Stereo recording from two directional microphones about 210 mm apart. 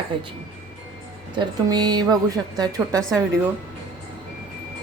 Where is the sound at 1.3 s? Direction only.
20° right (ahead or behind).